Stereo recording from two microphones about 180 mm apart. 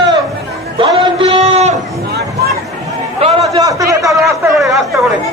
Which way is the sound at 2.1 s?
60° right (ahead or behind).